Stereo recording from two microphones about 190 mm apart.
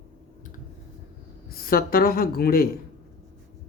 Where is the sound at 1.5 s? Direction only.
50° left (ahead or behind).